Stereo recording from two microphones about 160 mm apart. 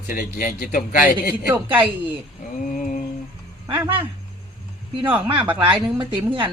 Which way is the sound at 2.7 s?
50° left (ahead or behind).